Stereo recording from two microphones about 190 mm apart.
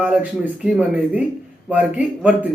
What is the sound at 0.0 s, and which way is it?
A man's voice, 5° right (ahead or behind).